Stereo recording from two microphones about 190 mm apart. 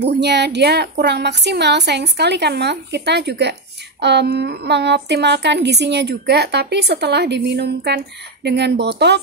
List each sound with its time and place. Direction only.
0.0 s a woman's voice: 65° right (ahead or behind)